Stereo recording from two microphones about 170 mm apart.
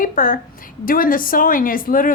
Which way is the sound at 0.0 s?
55° left (ahead or behind).